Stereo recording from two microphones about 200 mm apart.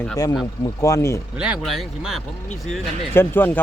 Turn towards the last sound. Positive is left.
turn(degrees=10)  # may be behind; listen again after turning